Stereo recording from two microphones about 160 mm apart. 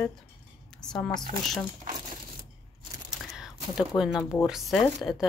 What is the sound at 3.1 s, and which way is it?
Speech, 5° right (ahead or behind).